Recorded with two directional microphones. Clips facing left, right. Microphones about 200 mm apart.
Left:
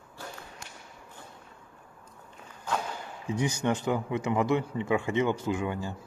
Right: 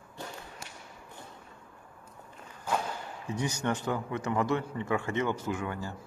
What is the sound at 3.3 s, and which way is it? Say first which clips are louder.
A man's voice: left 3 dB; 10° left (ahead or behind).